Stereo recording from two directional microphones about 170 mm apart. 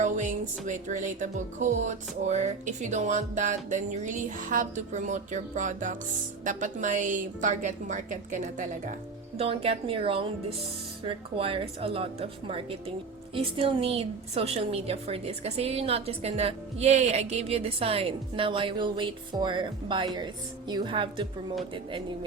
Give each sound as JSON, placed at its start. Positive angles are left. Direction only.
{"t": 0.0, "sound": "speech", "side_deg": -45}
{"t": 9.4, "sound": "a woman's voice", "side_deg": -35}